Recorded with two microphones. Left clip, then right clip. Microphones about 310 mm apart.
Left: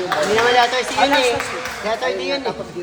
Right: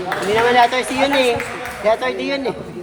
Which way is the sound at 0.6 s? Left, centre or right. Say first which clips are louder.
Right 1 dB; right.